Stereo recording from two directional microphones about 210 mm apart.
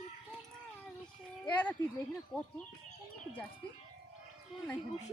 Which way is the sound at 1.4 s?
10° left (ahead or behind).